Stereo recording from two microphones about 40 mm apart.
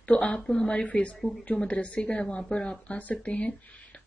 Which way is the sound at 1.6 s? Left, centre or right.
Left.